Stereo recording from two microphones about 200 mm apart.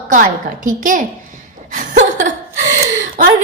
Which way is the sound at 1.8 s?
40° right (ahead or behind).